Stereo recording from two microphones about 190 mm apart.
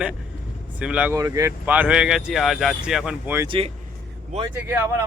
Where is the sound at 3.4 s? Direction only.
25° right (ahead or behind).